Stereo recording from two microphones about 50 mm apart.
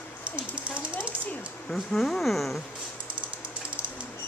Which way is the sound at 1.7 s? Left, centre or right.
Centre.